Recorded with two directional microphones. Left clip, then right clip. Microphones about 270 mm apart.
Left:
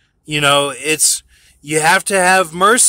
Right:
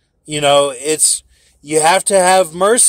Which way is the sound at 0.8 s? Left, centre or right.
Centre.